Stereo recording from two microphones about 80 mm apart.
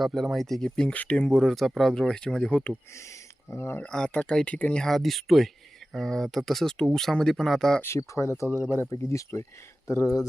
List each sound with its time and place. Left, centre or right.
0.0 s speech: centre
2.9 s speech: left
3.8 s speech: centre
7.8 s speech: left
8.4 s speech: centre
8.9 s speech: left